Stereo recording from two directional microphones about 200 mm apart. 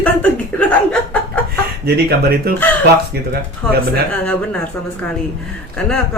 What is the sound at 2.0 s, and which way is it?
Speech, 50° right (ahead or behind).